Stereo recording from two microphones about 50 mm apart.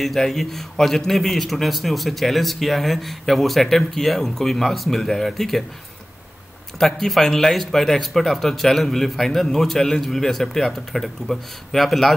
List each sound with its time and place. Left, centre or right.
0.0 s a man's voice: centre
6.8 s a man's voice: centre